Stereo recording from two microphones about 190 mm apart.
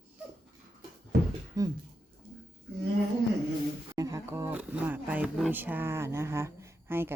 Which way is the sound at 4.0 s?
15° right (ahead or behind).